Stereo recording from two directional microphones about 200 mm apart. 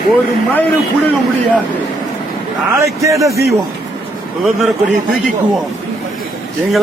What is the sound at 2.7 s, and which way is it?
Speech, 15° right (ahead or behind).